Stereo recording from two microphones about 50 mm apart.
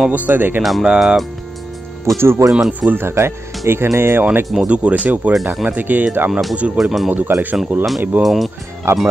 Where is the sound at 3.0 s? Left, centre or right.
Right.